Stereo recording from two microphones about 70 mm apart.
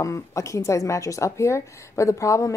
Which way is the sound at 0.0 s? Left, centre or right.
Left.